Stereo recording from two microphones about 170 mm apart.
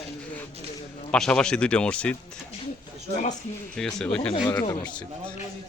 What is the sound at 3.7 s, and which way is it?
Speech, 5° left (ahead or behind).